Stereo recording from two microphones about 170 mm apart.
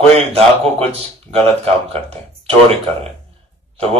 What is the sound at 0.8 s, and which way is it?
Speech, 35° right (ahead or behind).